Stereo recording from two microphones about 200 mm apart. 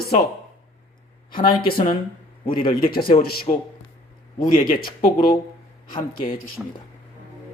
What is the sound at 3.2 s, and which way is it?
Speech, 50° left (ahead or behind).